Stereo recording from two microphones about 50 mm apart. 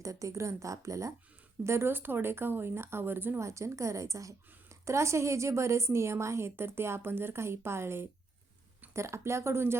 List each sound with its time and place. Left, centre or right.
0.0 s speech: right
1.6 s speech: right
3.4 s a woman's voice: right
6.6 s speech: right
8.9 s a woman's voice: right